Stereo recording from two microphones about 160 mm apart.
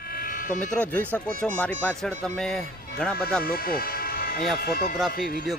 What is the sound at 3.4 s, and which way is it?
Speech, 70° left (ahead or behind).